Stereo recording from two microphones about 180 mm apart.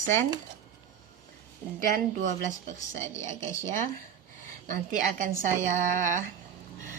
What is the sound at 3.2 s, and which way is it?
Speech, 15° left (ahead or behind).